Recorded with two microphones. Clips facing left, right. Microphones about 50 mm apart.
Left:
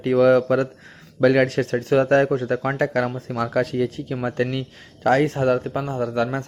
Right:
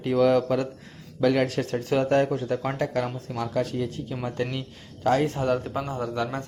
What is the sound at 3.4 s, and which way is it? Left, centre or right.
Speech, left.